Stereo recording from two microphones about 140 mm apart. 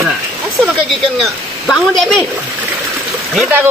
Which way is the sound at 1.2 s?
Centre (ahead or behind).